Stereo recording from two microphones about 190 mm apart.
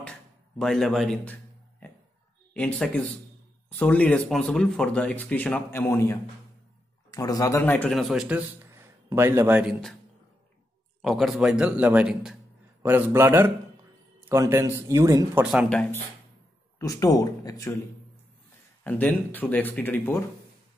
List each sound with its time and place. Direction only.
0.0 s a sound: 5° left (ahead or behind)
2.5 s a man's voice: 5° left (ahead or behind)
11.0 s a man's voice: centre (ahead or behind)
15.4 s a man's voice: centre (ahead or behind)
16.7 s speech: 15° left (ahead or behind)
18.9 s speech: 10° left (ahead or behind)